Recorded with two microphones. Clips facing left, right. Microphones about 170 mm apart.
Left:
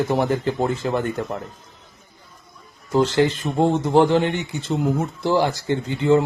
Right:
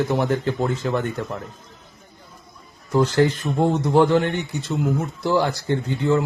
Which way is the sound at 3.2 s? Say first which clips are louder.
Even; 20° left (ahead or behind).